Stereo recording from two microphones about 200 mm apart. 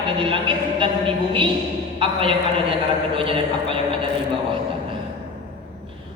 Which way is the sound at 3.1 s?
25° right (ahead or behind).